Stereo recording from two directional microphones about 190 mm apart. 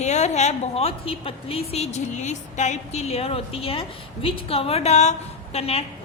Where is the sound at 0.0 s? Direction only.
35° left (ahead or behind).